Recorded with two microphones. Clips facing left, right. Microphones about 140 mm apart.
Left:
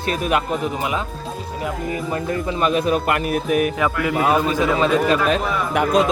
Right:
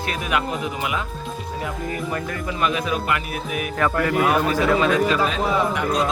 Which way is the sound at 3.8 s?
5° left (ahead or behind).